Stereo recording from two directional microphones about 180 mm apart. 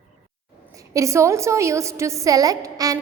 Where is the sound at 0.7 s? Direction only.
15° right (ahead or behind).